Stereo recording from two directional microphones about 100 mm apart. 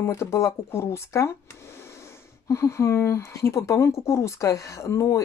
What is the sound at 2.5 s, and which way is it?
Speech, 30° left (ahead or behind).